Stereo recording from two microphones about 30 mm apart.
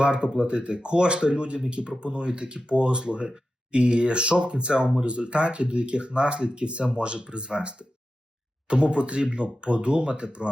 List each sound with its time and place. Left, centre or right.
0.0 s speech: right
8.7 s speech: right